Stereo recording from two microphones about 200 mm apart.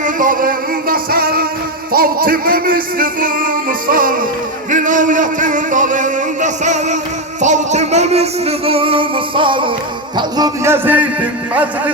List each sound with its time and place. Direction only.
0.0 s music: 40° right (ahead or behind)
4.7 s a sound: 40° right (ahead or behind)
7.4 s music: 35° right (ahead or behind)
10.2 s speech: 20° right (ahead or behind)